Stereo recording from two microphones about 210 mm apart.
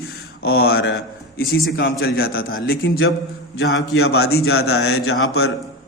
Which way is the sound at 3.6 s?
60° left (ahead or behind).